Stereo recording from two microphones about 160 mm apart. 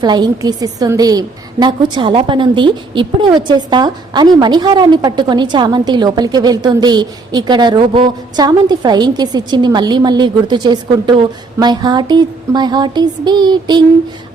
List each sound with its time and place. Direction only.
0.0 s a woman's voice: 25° right (ahead or behind)